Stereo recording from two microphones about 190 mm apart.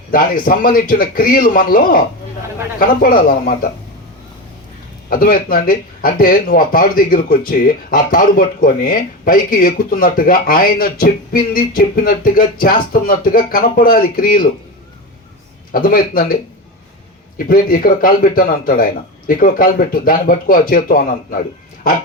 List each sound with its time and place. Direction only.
0.1 s speech: 45° left (ahead or behind)
5.0 s speech: 50° left (ahead or behind)
15.7 s speech: 50° left (ahead or behind)